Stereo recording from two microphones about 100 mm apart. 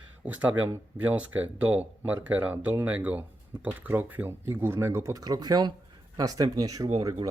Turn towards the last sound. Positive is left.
turn(degrees=-40)  # may be behind; listen again after turning